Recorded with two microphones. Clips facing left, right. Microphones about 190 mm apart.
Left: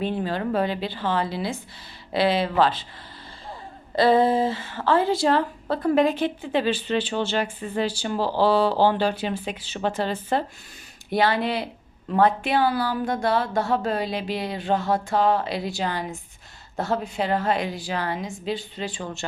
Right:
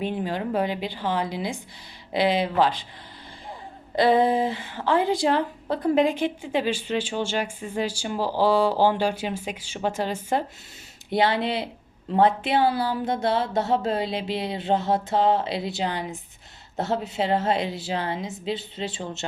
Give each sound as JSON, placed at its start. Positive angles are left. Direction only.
{"t": 0.0, "sound": "a woman's voice", "side_deg": -15}
{"t": 3.9, "sound": "a woman's voice", "side_deg": -20}
{"t": 11.1, "sound": "a sound", "side_deg": -20}